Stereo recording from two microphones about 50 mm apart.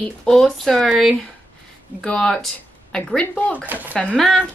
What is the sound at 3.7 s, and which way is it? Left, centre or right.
Speech, right.